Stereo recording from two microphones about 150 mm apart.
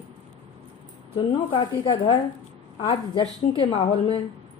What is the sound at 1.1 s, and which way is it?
A woman's voice, 35° left (ahead or behind).